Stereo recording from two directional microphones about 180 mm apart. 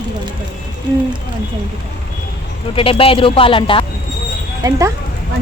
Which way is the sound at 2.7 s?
30° left (ahead or behind).